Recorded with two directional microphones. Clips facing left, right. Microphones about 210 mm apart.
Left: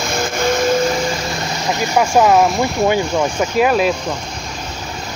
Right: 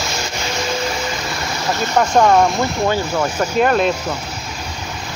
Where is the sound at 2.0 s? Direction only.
5° left (ahead or behind).